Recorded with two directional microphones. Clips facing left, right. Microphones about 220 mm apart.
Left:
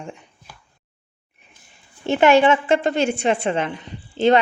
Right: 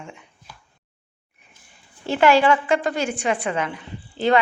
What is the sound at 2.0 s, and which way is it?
A woman's voice, 25° left (ahead or behind).